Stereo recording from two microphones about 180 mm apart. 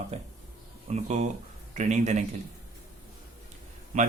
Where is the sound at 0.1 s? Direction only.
35° right (ahead or behind).